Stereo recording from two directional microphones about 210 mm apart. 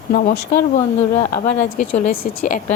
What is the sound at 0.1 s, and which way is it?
A woman's voice, 45° left (ahead or behind).